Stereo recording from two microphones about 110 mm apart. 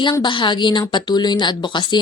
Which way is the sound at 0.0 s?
45° left (ahead or behind).